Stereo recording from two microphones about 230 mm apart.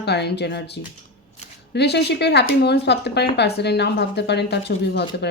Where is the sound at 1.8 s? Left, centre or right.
Left.